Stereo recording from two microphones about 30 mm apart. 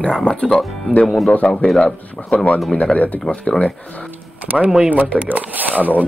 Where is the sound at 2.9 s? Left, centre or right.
Left.